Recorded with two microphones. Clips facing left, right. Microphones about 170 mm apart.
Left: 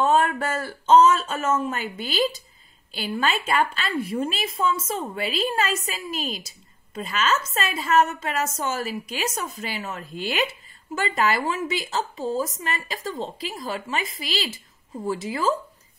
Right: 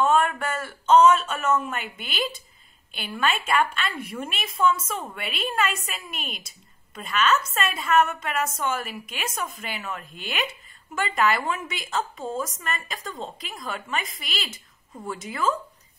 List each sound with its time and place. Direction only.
0.0 s a woman's voice: 30° left (ahead or behind)